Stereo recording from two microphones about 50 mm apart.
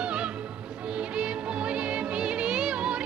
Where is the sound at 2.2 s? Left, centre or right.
Centre.